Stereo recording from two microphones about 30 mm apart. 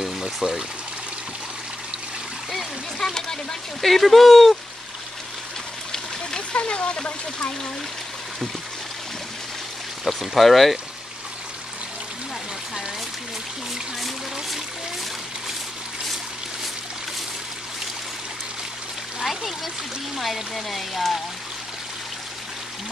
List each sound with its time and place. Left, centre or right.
0.2 s speech: right
3.0 s speech: centre
6.5 s speech: left
10.0 s speech: centre
19.2 s speech: centre